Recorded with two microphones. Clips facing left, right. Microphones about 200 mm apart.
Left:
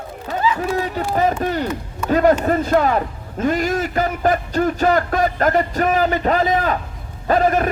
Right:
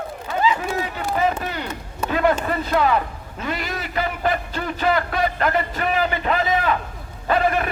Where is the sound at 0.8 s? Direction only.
40° left (ahead or behind).